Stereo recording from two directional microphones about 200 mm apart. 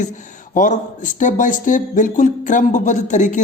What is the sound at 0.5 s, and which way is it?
Speech, 40° left (ahead or behind).